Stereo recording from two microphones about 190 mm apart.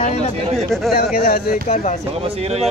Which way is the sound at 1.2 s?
55° left (ahead or behind).